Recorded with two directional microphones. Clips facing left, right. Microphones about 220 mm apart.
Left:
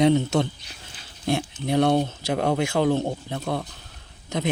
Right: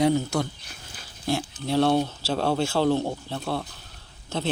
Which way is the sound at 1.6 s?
20° left (ahead or behind).